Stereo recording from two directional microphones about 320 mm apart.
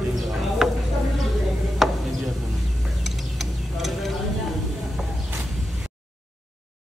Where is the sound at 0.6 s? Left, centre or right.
Centre.